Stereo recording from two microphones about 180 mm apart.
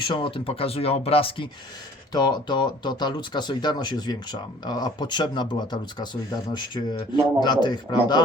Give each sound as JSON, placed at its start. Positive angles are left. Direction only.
{"t": 0.1, "sound": "speech", "side_deg": 30}